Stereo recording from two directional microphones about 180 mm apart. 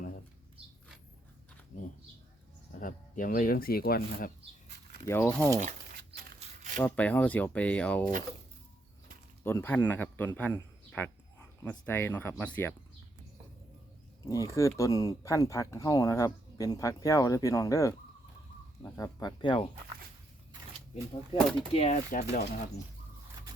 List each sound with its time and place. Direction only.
2.8 s speech: 50° left (ahead or behind)
5.0 s speech: 10° left (ahead or behind)
5.5 s a sound: 50° right (ahead or behind)
6.7 s speech: 10° left (ahead or behind)
9.4 s speech: 10° left (ahead or behind)
10.5 s a sound: 10° left (ahead or behind)
11.6 s speech: 10° left (ahead or behind)
14.3 s speech: 15° left (ahead or behind)
21.7 s speech: 35° left (ahead or behind)
22.1 s speech: 50° left (ahead or behind)